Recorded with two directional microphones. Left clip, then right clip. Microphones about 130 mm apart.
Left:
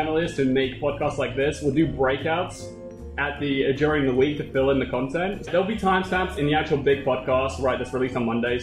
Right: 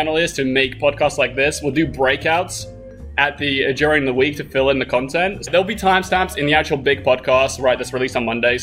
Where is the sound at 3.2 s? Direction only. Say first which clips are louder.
Right 7 dB; 30° right (ahead or behind).